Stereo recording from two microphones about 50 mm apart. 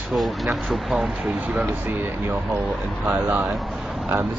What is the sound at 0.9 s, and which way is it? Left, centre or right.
Speech, centre.